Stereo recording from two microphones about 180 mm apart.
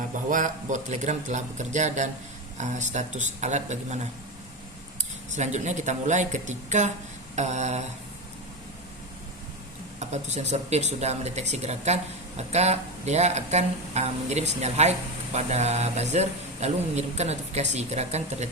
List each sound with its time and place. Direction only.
0.3 s speech: 45° right (ahead or behind)
5.3 s speech: 40° right (ahead or behind)
10.0 s speech: 40° right (ahead or behind)